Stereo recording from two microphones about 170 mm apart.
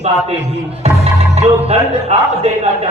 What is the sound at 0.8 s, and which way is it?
Music, 40° right (ahead or behind).